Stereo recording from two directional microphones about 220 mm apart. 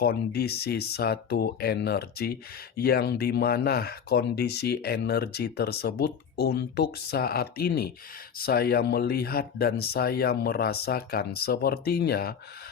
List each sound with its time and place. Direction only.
0.0 s speech: 45° left (ahead or behind)